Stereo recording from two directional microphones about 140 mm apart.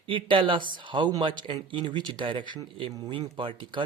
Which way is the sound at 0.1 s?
35° right (ahead or behind).